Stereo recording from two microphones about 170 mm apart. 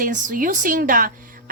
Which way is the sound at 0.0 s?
50° right (ahead or behind).